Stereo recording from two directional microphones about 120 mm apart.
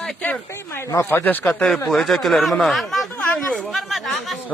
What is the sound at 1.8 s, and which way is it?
A man's voice, centre (ahead or behind).